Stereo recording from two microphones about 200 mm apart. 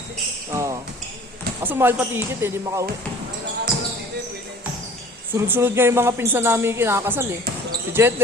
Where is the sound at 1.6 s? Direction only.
10° right (ahead or behind).